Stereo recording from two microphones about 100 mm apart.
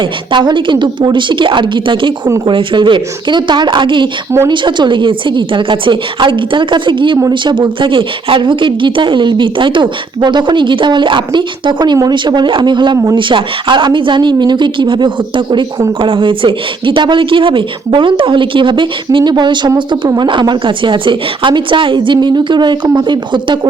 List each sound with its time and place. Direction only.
0.0 s speech: 50° right (ahead or behind)